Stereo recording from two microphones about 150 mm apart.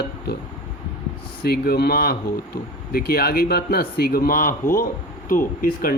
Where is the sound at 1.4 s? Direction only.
90° left.